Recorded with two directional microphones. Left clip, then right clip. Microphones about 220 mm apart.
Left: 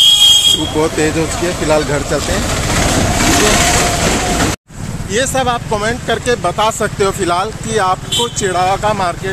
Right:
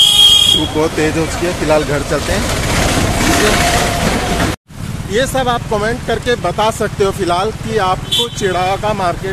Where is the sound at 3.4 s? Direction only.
45° left (ahead or behind).